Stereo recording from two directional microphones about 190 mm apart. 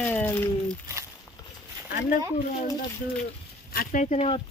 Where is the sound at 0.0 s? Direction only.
10° left (ahead or behind).